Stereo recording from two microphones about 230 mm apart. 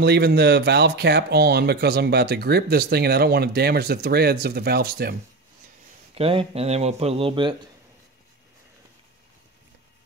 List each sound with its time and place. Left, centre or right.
0.0 s speech: right
6.1 s speech: right